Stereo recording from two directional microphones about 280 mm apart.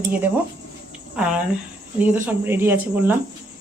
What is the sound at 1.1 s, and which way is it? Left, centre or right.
A woman's voice, centre.